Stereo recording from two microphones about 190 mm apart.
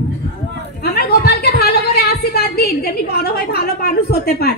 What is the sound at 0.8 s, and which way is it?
A woman's voice, 55° left (ahead or behind).